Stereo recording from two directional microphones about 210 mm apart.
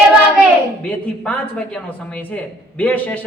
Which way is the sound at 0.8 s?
5° left (ahead or behind).